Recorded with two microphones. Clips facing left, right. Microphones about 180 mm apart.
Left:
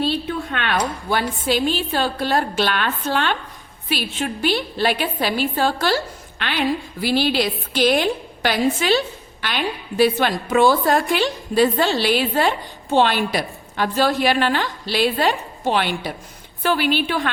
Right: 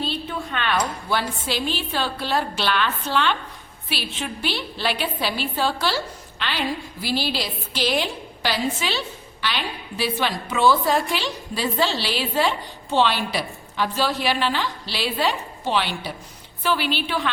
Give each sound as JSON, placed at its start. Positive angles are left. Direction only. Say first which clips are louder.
{"t": 0.3, "sound": "a woman's voice", "louder": "left 2 dB", "side_deg": 55}
{"t": 7.0, "sound": "a woman's voice", "louder": "left 7 dB", "side_deg": 60}